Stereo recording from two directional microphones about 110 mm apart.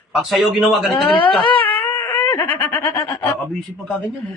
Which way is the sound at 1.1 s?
50° left (ahead or behind).